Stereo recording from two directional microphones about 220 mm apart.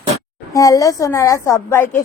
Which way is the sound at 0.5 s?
15° left (ahead or behind).